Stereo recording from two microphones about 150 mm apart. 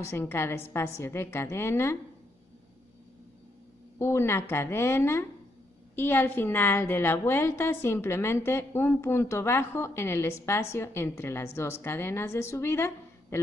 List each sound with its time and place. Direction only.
0.0 s a woman's voice: 15° left (ahead or behind)
4.0 s a woman's voice: 15° left (ahead or behind)